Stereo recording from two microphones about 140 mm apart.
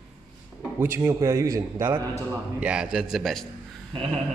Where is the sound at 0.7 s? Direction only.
15° right (ahead or behind).